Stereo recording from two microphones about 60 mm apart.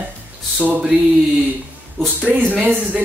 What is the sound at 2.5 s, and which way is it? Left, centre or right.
Speech, right.